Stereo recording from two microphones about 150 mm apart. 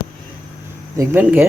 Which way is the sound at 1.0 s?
15° right (ahead or behind).